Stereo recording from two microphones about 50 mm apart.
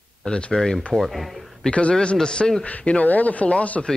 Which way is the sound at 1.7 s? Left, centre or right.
Left.